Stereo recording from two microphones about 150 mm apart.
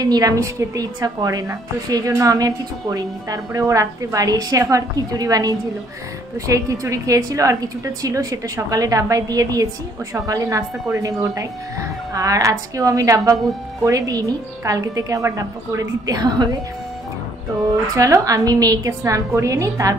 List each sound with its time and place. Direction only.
0.0 s a woman's voice: 25° right (ahead or behind)
17.9 s a woman's voice: 20° right (ahead or behind)